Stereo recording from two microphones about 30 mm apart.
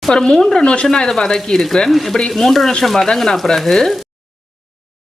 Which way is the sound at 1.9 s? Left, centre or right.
Centre.